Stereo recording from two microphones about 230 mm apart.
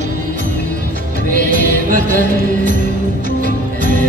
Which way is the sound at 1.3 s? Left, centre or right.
Right.